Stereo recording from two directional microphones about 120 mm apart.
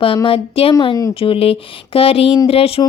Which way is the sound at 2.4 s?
55° left (ahead or behind).